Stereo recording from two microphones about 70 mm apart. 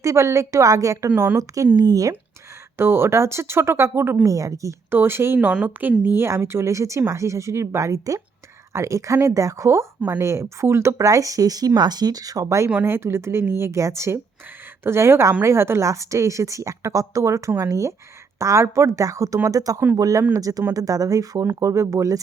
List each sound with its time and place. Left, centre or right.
0.0 s a woman's voice: right
1.1 s a woman's voice: right
1.7 s speech: right
2.7 s speech: right
4.3 s a woman's voice: right
4.9 s speech: right
5.4 s a woman's voice: centre; by 22.2 s right